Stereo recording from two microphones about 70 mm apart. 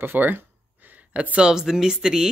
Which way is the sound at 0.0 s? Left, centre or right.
Right.